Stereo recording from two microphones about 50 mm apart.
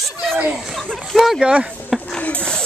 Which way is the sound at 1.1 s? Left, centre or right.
Centre.